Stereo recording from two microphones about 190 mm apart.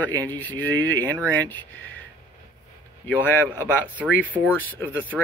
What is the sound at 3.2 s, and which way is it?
Speech, 10° left (ahead or behind).